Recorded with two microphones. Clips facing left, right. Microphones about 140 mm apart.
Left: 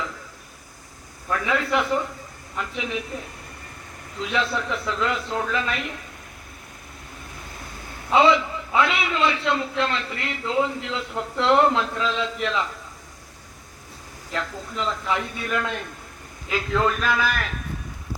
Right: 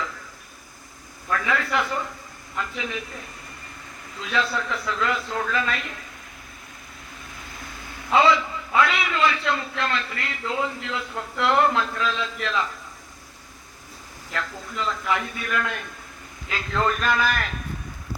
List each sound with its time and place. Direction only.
1.3 s a man's voice: 20° left (ahead or behind)
4.2 s a man's voice: 20° left (ahead or behind)
8.1 s a man's voice: 20° left (ahead or behind)
14.3 s a man's voice: 20° left (ahead or behind)
16.5 s a man's voice: 10° left (ahead or behind)